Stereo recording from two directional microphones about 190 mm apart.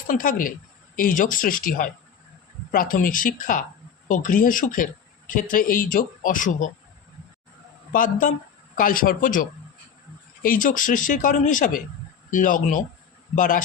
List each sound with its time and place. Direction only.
0.1 s speech: 45° left (ahead or behind)
7.9 s speech: 45° left (ahead or behind)